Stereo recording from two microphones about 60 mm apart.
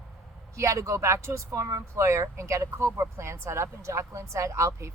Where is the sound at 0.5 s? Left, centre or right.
Right.